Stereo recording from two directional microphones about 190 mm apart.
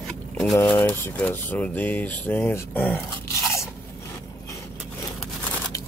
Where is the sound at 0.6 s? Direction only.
10° left (ahead or behind).